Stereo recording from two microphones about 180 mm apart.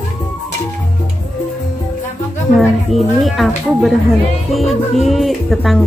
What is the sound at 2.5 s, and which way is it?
Speech, centre (ahead or behind).